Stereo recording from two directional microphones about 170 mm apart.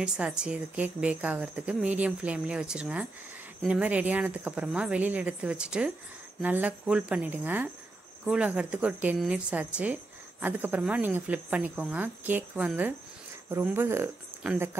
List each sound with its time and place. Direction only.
0.0 s speech: 5° right (ahead or behind)